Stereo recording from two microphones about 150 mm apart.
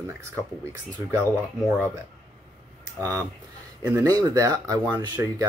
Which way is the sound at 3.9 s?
20° right (ahead or behind).